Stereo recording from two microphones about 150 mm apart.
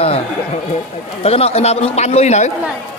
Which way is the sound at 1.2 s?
40° left (ahead or behind).